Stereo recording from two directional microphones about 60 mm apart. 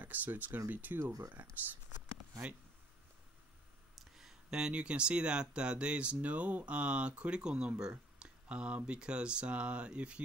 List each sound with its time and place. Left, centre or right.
0.0 s speech: right
4.0 s speech: centre